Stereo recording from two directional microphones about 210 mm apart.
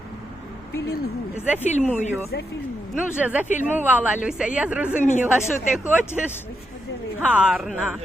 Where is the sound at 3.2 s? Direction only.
5° right (ahead or behind).